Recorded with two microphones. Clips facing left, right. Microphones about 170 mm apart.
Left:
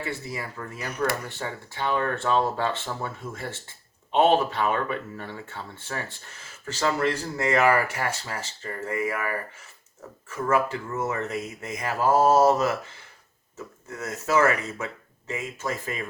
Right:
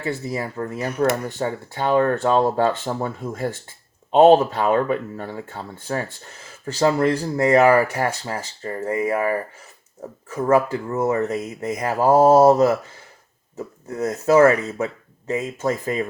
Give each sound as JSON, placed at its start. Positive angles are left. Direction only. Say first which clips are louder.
{"t": 0.3, "sound": "speech", "louder": "right 8 dB", "side_deg": -35}